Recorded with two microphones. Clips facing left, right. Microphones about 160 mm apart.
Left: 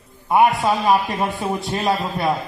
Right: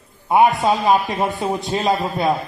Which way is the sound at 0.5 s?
20° right (ahead or behind).